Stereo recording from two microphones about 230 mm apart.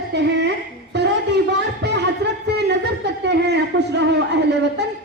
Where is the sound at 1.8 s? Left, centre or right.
Right.